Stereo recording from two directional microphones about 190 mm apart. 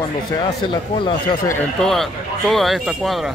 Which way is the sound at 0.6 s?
25° left (ahead or behind).